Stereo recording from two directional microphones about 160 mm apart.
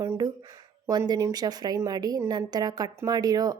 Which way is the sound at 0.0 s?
20° right (ahead or behind).